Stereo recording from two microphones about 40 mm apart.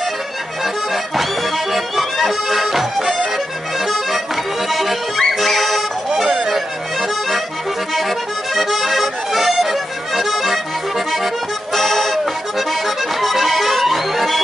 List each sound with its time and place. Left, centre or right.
1.7 s music: centre
3.8 s accordion: centre
4.6 s music: centre
8.5 s accordion: centre
11.7 s accordion: centre